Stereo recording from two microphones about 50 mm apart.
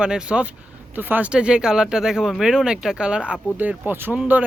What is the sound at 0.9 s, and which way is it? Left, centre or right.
Speech, right.